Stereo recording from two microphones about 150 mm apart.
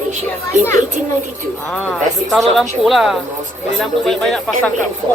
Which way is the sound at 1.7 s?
5° left (ahead or behind).